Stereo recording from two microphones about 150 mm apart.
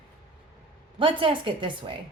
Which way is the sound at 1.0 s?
35° right (ahead or behind).